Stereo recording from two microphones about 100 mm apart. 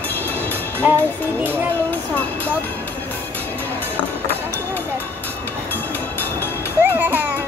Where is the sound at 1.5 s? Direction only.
20° left (ahead or behind).